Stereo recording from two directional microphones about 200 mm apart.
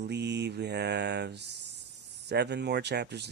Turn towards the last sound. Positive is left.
turn(degrees=-55)  # may be behind; listen again after turning